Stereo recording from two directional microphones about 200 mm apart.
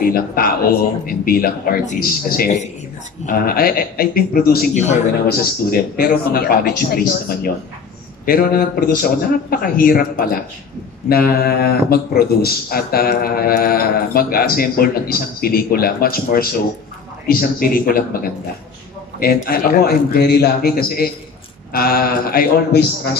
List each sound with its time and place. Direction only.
0.0 s speech: 45° left (ahead or behind)
19.1 s speech: 50° left (ahead or behind)